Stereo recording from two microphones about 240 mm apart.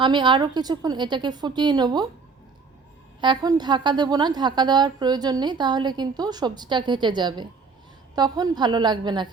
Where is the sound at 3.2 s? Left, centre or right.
Centre.